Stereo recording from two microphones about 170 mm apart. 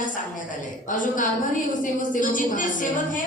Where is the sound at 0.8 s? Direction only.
50° left (ahead or behind).